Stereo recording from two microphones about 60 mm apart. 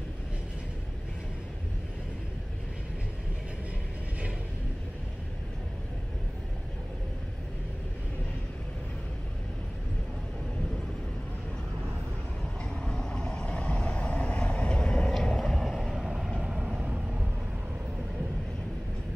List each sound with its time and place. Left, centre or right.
12.8 s vehicle: centre
15.1 s vehicle: centre
16.3 s vehicle: centre
16.7 s vehicle: right